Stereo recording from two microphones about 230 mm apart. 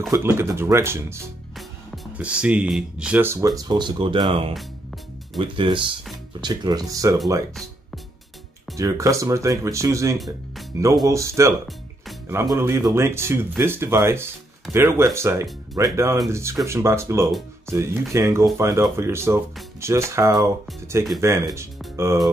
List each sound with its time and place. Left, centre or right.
0.1 s speech: centre
8.7 s speech: centre